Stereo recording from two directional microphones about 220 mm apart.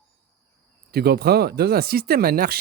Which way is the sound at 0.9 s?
45° right (ahead or behind).